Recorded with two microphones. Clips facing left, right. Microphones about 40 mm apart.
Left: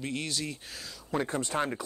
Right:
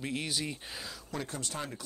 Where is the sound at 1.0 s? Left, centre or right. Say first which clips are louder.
Left 9 dB; left.